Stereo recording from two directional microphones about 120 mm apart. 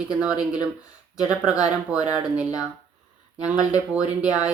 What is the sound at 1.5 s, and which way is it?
Speech, 30° left (ahead or behind).